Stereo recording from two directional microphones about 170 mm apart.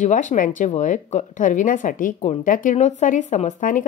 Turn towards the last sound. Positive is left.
turn(degrees=50)  # may be behind; listen again after turning